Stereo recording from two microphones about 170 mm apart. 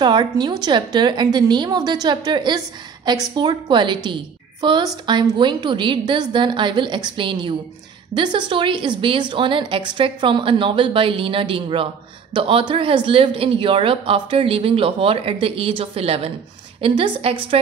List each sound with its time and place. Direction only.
0.0 s a woman's voice: 25° right (ahead or behind)